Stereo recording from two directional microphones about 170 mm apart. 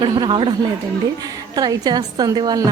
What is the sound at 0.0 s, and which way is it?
A woman's voice, 30° right (ahead or behind).